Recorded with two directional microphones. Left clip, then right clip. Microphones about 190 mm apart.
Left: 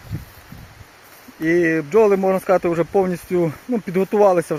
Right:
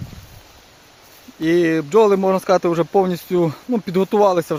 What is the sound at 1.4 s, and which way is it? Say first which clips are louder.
Speech: right 1 dB; 15° right (ahead or behind).